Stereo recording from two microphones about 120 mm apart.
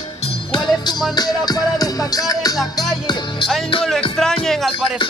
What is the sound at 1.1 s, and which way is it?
Music, 35° left (ahead or behind).